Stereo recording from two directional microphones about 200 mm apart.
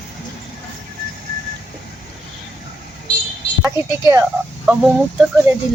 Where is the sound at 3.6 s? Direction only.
10° right (ahead or behind).